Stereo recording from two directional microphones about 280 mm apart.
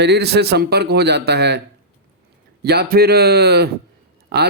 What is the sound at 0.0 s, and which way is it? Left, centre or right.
Speech, right.